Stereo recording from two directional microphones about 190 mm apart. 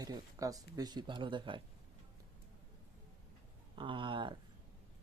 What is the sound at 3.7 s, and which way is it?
Speech, 25° right (ahead or behind).